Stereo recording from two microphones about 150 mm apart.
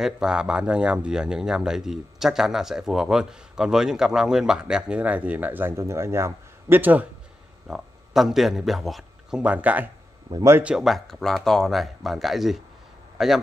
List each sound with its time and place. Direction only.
0.0 s a man's voice: 5° right (ahead or behind)
10.3 s speech: 20° right (ahead or behind)
10.6 s a man's voice: 5° right (ahead or behind)